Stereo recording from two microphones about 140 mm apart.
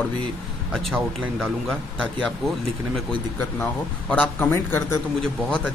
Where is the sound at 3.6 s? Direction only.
15° left (ahead or behind).